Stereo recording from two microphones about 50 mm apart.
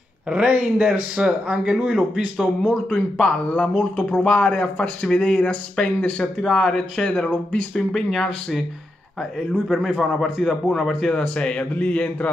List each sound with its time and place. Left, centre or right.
0.3 s speech: centre
2.4 s speech: centre
6.5 s speech: centre
7.1 s speech: left
7.7 s a man's voice: centre
10.2 s speech: centre; by 12.3 s left